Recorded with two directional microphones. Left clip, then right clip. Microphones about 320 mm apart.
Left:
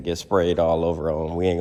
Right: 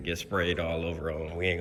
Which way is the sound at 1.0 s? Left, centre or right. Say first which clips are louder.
Left 9 dB; left.